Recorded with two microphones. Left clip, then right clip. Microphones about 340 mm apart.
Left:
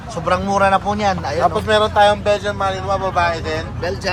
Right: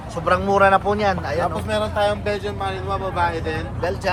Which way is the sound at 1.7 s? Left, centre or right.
Left.